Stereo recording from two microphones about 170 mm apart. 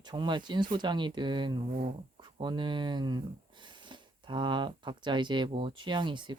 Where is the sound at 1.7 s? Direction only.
55° right (ahead or behind).